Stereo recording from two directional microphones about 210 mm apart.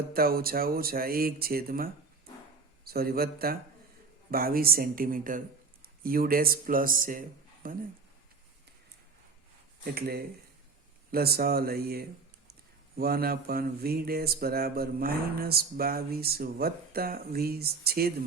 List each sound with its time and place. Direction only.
0.1 s speech: 45° right (ahead or behind)
9.8 s speech: 45° right (ahead or behind)